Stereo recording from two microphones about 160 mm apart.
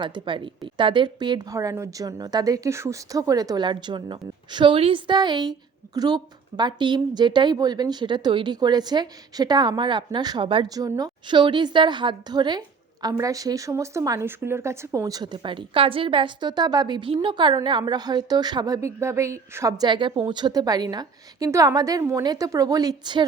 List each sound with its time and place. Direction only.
0.0 s a woman's voice: 30° right (ahead or behind)